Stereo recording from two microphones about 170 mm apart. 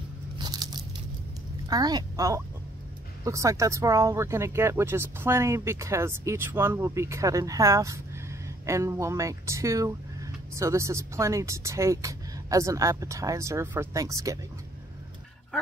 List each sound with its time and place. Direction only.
0.4 s crunch: 25° right (ahead or behind)
1.7 s a woman's voice: 25° right (ahead or behind)